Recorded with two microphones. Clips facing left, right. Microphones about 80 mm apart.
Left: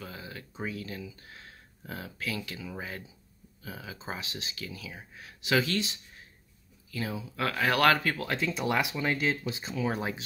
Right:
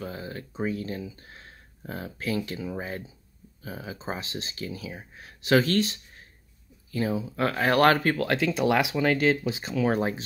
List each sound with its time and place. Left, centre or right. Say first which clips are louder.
0.0 s speech: right 7 dB; right
5.4 s speech: right 6 dB; right
6.9 s speech: right 7 dB; right
8.2 s speech: right 7 dB; right
9.9 s speech: right 7 dB; right